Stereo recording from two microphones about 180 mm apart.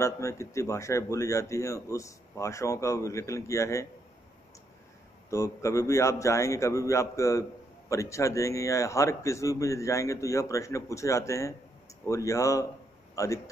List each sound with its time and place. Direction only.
0.0 s speech: 15° left (ahead or behind)
5.3 s a man's voice: 15° left (ahead or behind)